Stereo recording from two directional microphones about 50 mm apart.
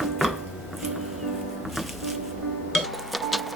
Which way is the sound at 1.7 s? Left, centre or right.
Centre.